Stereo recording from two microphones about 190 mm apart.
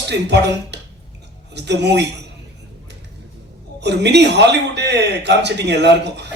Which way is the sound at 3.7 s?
60° right (ahead or behind).